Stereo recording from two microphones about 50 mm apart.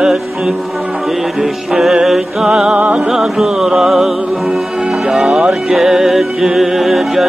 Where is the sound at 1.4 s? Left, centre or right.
Centre.